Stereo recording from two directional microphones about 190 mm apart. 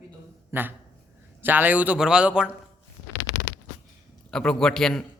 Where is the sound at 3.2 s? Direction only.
70° left (ahead or behind).